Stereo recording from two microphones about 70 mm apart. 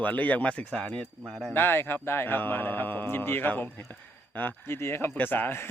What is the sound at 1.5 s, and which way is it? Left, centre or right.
A man's voice, left.